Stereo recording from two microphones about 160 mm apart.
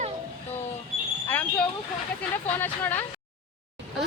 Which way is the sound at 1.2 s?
10° left (ahead or behind).